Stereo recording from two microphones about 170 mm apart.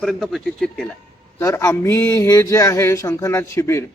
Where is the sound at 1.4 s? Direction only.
20° left (ahead or behind).